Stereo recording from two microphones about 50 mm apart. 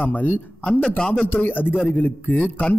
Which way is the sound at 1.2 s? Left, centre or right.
Left.